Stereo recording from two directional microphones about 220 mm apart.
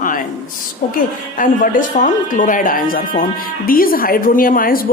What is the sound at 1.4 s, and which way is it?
A woman's voice, 40° left (ahead or behind).